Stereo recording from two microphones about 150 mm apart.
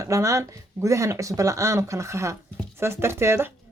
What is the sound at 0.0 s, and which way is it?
Speech, 20° right (ahead or behind).